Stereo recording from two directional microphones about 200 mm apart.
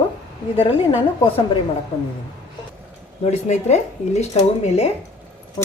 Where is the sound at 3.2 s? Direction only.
35° left (ahead or behind).